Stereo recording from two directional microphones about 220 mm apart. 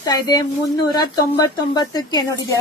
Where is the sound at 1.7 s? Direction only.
20° left (ahead or behind).